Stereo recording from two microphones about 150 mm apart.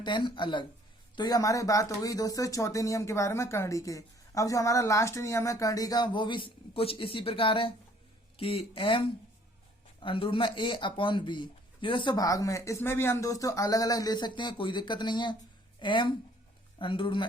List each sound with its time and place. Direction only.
0.0 s speech: 30° left (ahead or behind)